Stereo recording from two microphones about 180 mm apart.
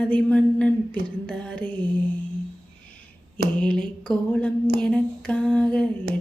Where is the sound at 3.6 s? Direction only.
5° left (ahead or behind).